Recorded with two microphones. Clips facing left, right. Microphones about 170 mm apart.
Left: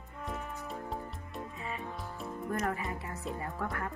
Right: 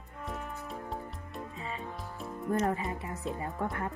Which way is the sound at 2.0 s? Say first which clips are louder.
Even; centre (ahead or behind).